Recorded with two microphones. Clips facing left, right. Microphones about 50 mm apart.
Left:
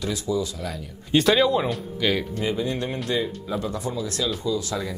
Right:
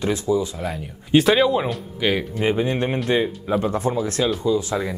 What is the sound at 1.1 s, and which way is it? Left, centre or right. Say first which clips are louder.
Speech: right 3 dB; centre.